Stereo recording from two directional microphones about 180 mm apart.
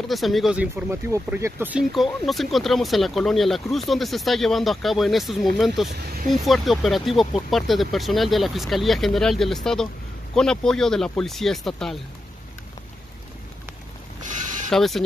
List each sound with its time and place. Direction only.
0.1 s speech: centre (ahead or behind)
5.9 s speech: 60° right (ahead or behind)
6.4 s speech: centre (ahead or behind)
14.7 s speech: centre (ahead or behind)